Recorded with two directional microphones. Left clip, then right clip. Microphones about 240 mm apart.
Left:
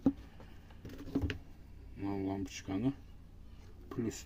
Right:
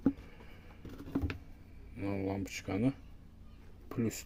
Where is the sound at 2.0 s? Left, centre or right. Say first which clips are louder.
Right 1 dB; right.